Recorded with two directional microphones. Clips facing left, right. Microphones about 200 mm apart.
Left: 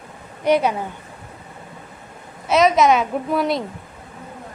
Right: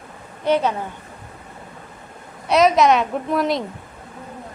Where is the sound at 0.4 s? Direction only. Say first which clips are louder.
Left 2 dB; 10° left (ahead or behind).